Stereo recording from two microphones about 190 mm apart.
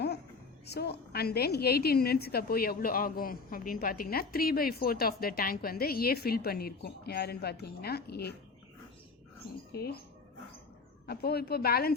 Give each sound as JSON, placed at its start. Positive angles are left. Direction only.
{"t": 0.7, "sound": "a woman's voice", "side_deg": 60}
{"t": 9.7, "sound": "a woman's voice", "side_deg": 55}
{"t": 11.0, "sound": "a woman's voice", "side_deg": 55}